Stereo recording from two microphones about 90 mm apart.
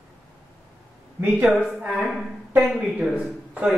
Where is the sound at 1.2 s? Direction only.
20° right (ahead or behind).